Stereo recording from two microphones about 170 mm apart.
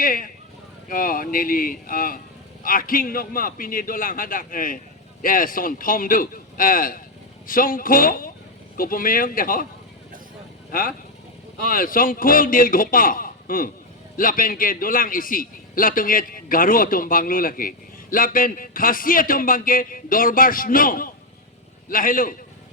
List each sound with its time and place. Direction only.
0.0 s a man's voice: 55° left (ahead or behind)
10.7 s a man's voice: 55° left (ahead or behind)